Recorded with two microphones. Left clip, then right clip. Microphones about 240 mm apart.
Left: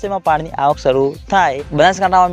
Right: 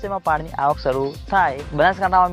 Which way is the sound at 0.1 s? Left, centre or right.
Left.